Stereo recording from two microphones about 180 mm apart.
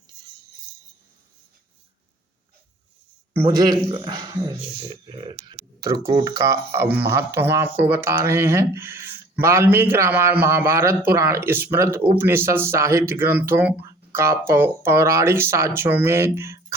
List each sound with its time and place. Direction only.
3.5 s speech: 25° right (ahead or behind)
6.0 s speech: 20° right (ahead or behind)